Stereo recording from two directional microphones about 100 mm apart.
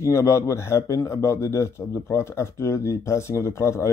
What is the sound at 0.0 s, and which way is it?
A man's voice, 30° left (ahead or behind).